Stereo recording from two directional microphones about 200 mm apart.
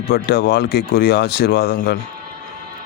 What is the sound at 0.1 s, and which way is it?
Speech, 55° left (ahead or behind).